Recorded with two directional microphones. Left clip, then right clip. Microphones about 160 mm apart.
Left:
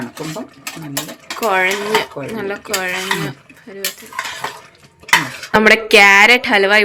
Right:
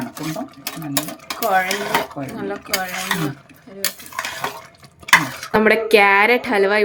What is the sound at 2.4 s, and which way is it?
Dishes, 20° left (ahead or behind).